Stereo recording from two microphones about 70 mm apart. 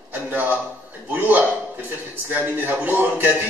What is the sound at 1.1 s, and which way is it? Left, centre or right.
A man's voice, right.